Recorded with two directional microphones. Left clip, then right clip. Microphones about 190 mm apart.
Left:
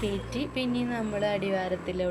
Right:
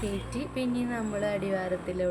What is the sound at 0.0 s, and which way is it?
Speech, 5° right (ahead or behind).